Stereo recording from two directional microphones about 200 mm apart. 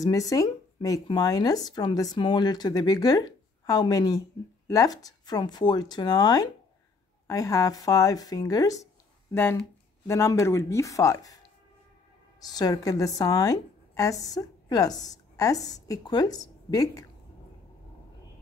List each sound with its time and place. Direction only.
0.0 s speech: 15° left (ahead or behind)
12.4 s a woman's voice: 20° left (ahead or behind)